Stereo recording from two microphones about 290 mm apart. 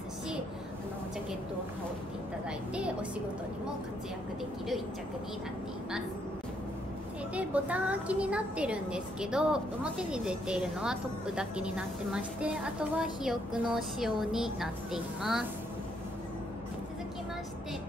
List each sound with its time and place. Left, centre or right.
2.7 s a woman's voice: centre
7.3 s a woman's voice: centre